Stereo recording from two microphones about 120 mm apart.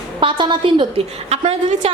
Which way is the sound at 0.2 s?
45° right (ahead or behind).